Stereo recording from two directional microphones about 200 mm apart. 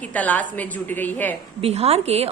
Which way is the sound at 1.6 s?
30° right (ahead or behind).